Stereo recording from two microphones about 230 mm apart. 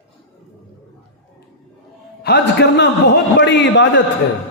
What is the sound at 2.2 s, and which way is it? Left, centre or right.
A man's voice, left.